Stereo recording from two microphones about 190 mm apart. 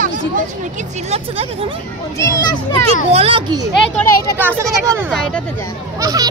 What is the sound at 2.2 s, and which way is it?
Speech, 15° left (ahead or behind).